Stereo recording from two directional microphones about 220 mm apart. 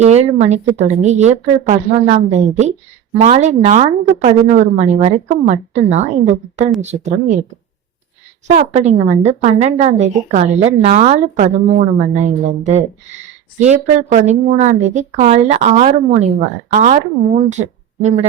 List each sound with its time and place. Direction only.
0.0 s a woman's voice: 30° right (ahead or behind)
8.4 s a woman's voice: 30° right (ahead or behind)